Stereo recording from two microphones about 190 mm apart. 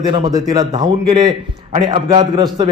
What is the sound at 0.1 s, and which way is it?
A man's voice, 20° right (ahead or behind).